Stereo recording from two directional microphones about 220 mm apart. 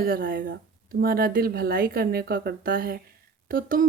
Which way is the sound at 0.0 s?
40° right (ahead or behind).